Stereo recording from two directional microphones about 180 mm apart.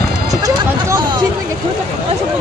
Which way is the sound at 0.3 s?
20° right (ahead or behind).